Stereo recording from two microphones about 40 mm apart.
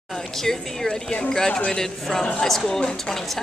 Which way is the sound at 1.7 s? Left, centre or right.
Centre.